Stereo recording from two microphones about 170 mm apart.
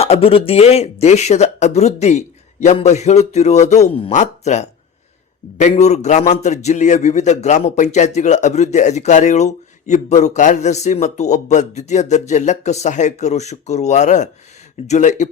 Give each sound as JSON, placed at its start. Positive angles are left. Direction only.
{"t": 0.0, "sound": "a man's voice", "side_deg": 35}